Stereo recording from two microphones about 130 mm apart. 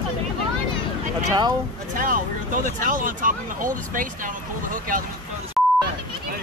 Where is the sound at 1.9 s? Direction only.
90° right.